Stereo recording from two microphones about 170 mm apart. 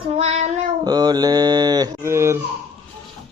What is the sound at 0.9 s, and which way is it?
Speech, 25° right (ahead or behind).